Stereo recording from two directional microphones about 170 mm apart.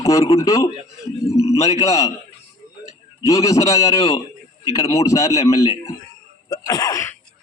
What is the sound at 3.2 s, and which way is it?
Speech, 20° left (ahead or behind).